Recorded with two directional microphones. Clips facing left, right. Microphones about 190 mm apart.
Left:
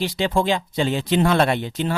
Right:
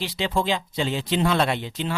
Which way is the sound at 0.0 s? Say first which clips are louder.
Left 4 dB; 50° left (ahead or behind).